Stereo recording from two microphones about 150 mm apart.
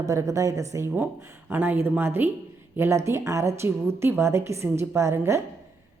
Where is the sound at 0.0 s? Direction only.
20° right (ahead or behind).